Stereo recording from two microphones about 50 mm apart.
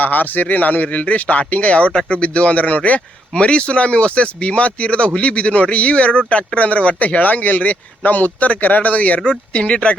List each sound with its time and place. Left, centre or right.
0.0 s speech: left